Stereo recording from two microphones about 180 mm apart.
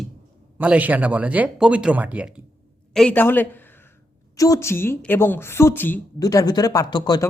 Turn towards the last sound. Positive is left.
turn(degrees=20)  # may be behind; listen again after turning